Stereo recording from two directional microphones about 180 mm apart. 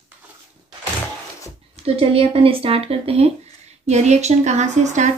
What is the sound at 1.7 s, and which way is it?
Speech, 35° right (ahead or behind).